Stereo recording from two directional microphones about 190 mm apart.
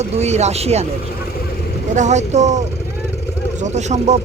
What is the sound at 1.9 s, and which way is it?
Speech, 40° right (ahead or behind).